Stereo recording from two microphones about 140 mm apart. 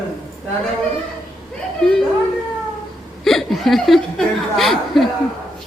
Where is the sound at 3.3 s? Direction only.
Centre (ahead or behind).